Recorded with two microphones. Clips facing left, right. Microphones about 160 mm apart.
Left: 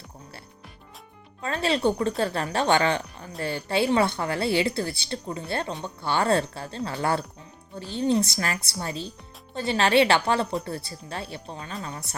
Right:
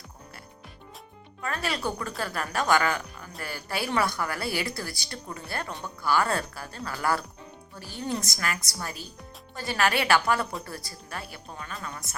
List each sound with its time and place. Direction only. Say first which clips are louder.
1.4 s speech: left 6 dB; 25° left (ahead or behind)